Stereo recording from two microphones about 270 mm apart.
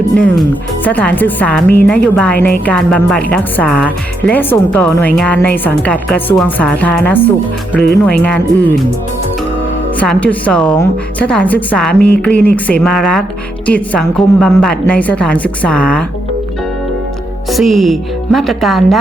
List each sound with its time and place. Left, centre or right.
0.9 s speech: centre
10.0 s speech: centre
11.9 s speech: left
12.2 s speech: centre
17.5 s speech: centre